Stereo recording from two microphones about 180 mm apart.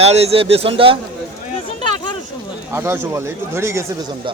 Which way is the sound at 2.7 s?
15° right (ahead or behind).